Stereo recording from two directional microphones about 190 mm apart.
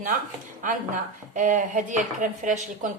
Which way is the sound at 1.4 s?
40° right (ahead or behind).